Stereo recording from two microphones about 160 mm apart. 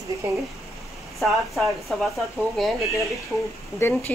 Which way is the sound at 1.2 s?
Centre (ahead or behind).